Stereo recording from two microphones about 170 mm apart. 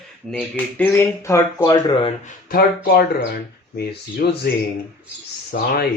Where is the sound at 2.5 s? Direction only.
60° left (ahead or behind).